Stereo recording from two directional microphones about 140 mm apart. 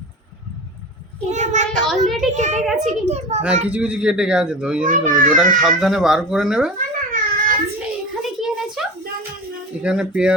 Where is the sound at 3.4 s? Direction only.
10° right (ahead or behind).